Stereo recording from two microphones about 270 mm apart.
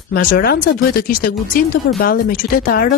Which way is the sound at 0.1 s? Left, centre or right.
Left.